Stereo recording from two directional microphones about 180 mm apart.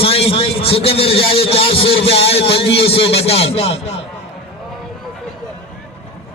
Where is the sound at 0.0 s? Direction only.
30° left (ahead or behind).